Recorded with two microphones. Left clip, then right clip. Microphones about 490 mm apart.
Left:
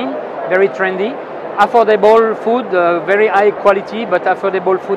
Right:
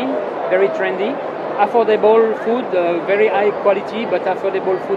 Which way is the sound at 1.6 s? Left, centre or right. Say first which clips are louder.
Left 4 dB; left.